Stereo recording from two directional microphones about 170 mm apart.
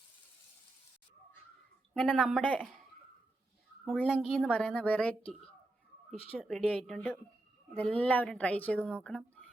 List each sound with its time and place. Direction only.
1.9 s speech: 5° left (ahead or behind)
4.1 s speech: centre (ahead or behind)